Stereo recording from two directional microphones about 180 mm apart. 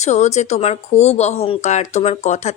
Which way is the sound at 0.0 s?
40° left (ahead or behind).